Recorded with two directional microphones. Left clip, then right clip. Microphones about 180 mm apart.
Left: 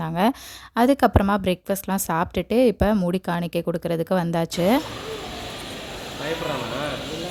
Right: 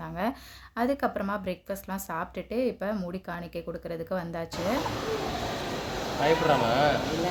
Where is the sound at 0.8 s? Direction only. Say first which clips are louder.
Left 10 dB; 65° left (ahead or behind).